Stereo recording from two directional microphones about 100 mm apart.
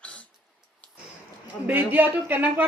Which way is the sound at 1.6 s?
20° right (ahead or behind).